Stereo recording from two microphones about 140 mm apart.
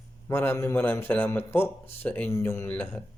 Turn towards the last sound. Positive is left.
turn(degrees=10)  # may be behind; listen again after turning